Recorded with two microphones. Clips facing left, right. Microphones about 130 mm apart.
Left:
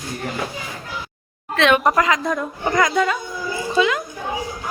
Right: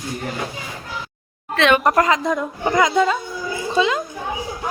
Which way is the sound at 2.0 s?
25° right (ahead or behind).